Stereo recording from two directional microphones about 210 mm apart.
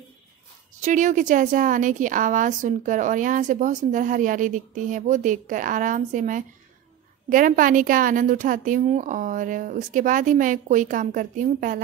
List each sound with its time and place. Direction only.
0.8 s a woman's voice: 35° right (ahead or behind)